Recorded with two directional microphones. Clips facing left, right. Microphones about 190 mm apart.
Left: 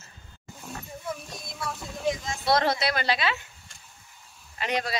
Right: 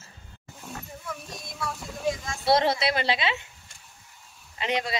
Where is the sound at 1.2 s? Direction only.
Centre (ahead or behind).